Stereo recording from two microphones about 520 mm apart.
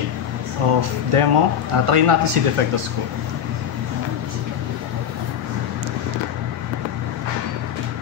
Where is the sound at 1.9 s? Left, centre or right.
Right.